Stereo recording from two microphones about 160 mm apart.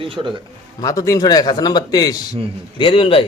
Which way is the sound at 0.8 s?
20° left (ahead or behind).